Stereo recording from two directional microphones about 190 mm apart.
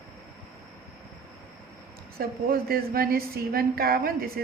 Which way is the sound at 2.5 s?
50° right (ahead or behind).